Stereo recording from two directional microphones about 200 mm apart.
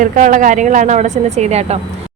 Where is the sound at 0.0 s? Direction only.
40° right (ahead or behind).